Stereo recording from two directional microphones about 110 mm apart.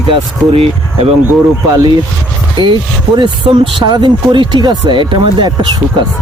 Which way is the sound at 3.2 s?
45° right (ahead or behind).